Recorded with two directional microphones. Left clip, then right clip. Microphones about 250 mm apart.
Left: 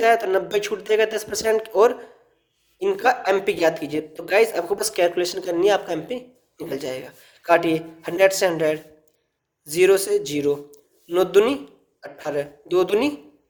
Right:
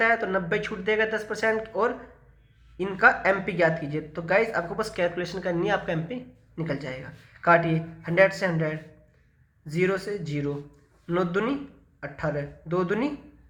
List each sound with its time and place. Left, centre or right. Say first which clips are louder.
0.0 s speech: left 5 dB; left
9.8 s speech: left 10 dB; left